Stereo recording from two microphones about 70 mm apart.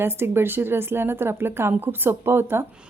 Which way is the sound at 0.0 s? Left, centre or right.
Right.